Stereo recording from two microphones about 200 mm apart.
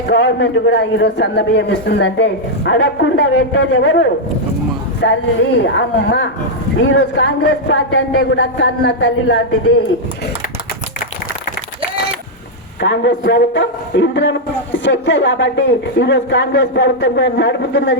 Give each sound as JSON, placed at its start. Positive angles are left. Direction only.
{"t": 0.1, "sound": "a man's voice", "side_deg": 65}
{"t": 12.8, "sound": "a man's voice", "side_deg": 65}